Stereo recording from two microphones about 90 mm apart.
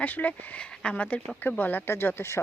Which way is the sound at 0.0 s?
15° left (ahead or behind).